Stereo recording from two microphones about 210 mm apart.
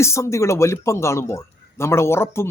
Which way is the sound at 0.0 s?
15° left (ahead or behind).